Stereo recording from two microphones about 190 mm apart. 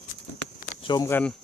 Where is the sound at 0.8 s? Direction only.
25° left (ahead or behind).